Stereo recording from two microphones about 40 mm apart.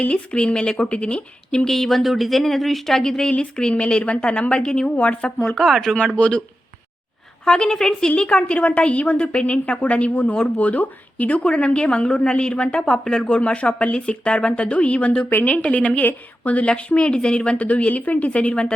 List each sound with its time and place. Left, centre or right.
0.0 s a woman's voice: left
1.6 s speech: centre
3.2 s a woman's voice: left
4.9 s speech: left
5.4 s speech: centre
6.1 s a woman's voice: left
7.4 s a woman's voice: centre
8.1 s speech: left
11.4 s a woman's voice: left
13.2 s speech: left
15.8 s a woman's voice: left
16.0 s a woman's voice: left
16.6 s a woman's voice: left
18.3 s a woman's voice: left